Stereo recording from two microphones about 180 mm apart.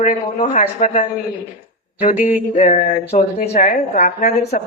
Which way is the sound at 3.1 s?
35° left (ahead or behind).